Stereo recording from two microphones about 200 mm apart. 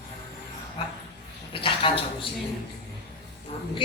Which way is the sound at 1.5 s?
25° left (ahead or behind).